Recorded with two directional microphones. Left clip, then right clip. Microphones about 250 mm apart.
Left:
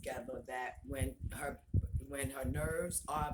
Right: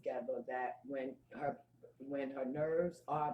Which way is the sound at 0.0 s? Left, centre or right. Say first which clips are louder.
Right 3 dB; left.